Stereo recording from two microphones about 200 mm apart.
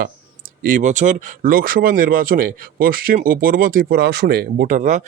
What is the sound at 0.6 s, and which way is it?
Speech, 40° right (ahead or behind).